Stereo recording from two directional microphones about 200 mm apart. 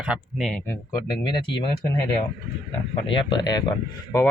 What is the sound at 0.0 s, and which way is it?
Speech, centre (ahead or behind).